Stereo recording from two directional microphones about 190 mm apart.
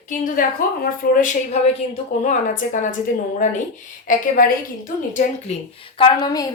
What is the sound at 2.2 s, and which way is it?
Speech, 40° left (ahead or behind).